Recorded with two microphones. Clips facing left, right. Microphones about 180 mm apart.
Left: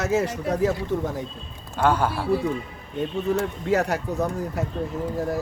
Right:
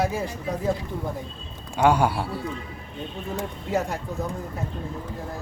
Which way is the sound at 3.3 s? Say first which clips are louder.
Left 3 dB; 80° left.